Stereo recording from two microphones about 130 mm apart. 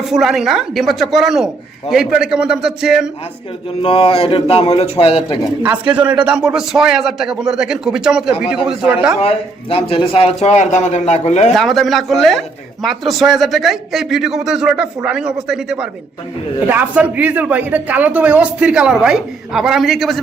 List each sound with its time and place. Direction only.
0.0 s speech: centre (ahead or behind)
3.8 s a man's voice: 45° left (ahead or behind)
5.6 s speech: 10° right (ahead or behind)
9.2 s a man's voice: 50° left (ahead or behind)
11.5 s speech: centre (ahead or behind)